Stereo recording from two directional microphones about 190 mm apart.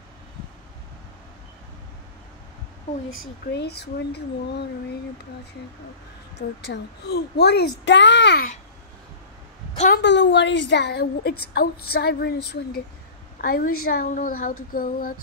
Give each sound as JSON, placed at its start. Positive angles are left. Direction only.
{"t": 3.1, "sound": "a woman's voice", "side_deg": 75}
{"t": 6.3, "sound": "a woman's voice", "side_deg": 60}
{"t": 9.8, "sound": "a woman's voice", "side_deg": 50}
{"t": 10.0, "sound": "a woman's voice", "side_deg": 65}